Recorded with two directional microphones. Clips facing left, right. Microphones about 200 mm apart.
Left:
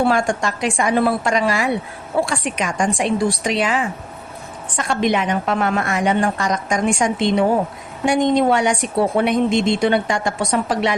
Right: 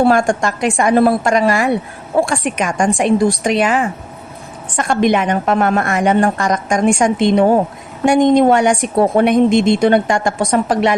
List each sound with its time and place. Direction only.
0.0 s a woman's voice: 45° right (ahead or behind)